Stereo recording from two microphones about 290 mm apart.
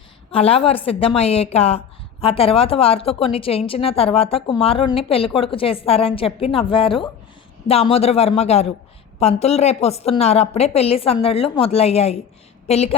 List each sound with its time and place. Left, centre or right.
0.3 s a woman's voice: centre